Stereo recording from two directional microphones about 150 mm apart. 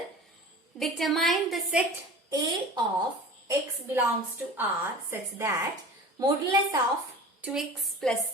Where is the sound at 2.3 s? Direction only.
25° right (ahead or behind).